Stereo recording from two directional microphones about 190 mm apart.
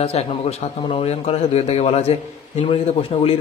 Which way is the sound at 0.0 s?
35° left (ahead or behind).